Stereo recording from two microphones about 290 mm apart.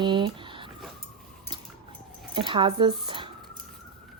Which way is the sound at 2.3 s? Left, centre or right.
Centre.